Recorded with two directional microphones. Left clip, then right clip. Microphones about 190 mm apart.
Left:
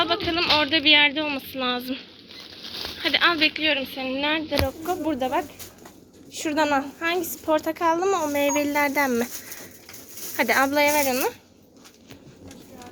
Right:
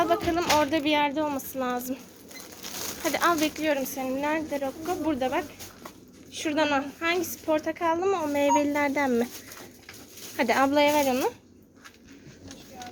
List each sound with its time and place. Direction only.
0.0 s music: 15° right (ahead or behind)
0.4 s speech: centre (ahead or behind)
0.7 s speech: 15° right (ahead or behind)
3.0 s speech: 20° right (ahead or behind)
3.9 s a woman's voice: centre (ahead or behind)
10.3 s speech: 5° right (ahead or behind)